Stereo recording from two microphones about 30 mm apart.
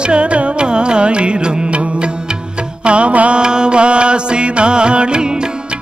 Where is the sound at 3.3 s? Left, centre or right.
Right.